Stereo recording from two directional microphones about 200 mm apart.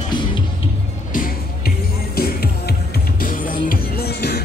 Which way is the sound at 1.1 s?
45° left (ahead or behind).